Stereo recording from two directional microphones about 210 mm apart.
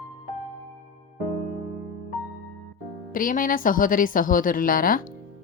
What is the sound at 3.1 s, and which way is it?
A woman's voice, 40° left (ahead or behind).